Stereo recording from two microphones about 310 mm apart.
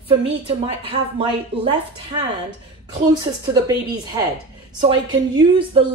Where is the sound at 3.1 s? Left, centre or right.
Centre.